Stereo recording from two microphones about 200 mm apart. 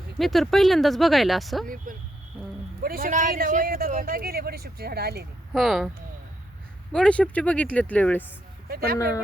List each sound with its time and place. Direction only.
0.2 s speech: centre (ahead or behind)
1.6 s a man's voice: 45° right (ahead or behind)
5.5 s speech: centre (ahead or behind)
6.9 s speech: 5° left (ahead or behind)